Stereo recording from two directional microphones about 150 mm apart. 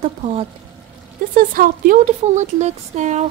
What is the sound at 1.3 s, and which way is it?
Speech, 65° right (ahead or behind).